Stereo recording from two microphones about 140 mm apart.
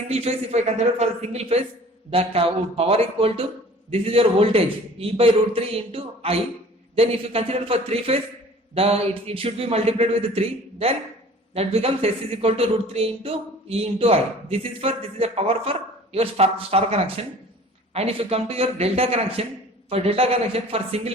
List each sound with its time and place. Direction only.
0.1 s speech: 50° right (ahead or behind)